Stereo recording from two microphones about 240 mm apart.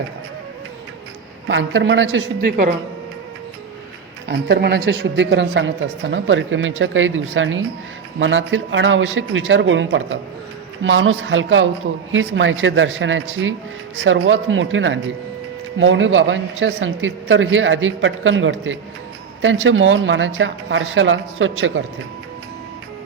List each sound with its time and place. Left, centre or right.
1.5 s speech: right
4.3 s speech: right